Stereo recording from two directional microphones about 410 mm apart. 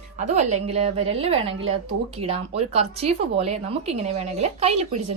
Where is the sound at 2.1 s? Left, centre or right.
Centre.